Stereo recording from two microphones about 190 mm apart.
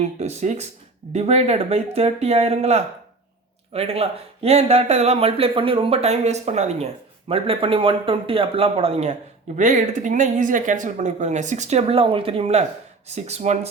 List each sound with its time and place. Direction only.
0.0 s speech: 35° right (ahead or behind)